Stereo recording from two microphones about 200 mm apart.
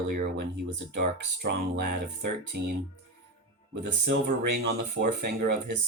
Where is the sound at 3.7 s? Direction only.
60° right (ahead or behind).